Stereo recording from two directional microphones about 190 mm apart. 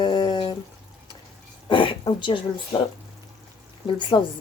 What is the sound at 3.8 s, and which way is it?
Speech, 25° left (ahead or behind).